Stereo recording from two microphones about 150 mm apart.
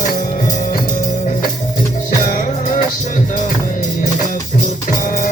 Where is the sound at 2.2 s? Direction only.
65° left (ahead or behind).